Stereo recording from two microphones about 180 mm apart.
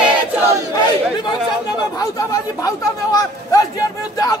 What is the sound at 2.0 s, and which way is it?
A man's voice, 20° left (ahead or behind).